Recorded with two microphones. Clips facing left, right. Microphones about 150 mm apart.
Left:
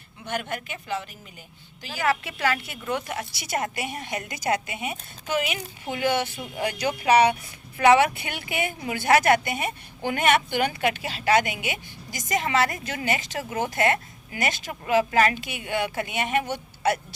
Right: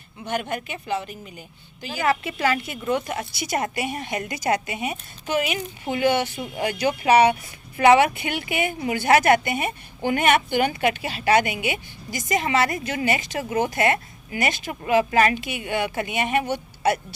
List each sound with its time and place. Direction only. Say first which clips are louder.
0.3 s a woman's voice: right 3 dB; 20° right (ahead or behind)